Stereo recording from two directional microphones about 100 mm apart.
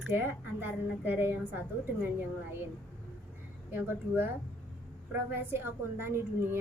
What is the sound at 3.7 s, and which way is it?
A woman's voice, 20° right (ahead or behind).